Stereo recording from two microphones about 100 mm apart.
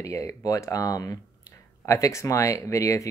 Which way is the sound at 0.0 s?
30° left (ahead or behind).